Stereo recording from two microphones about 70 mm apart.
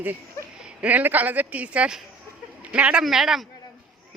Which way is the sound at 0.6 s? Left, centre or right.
Centre.